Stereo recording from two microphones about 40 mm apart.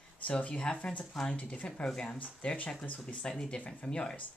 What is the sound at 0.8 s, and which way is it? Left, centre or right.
Speech, left.